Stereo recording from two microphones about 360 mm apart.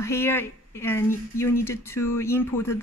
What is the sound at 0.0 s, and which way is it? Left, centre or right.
Speech, centre.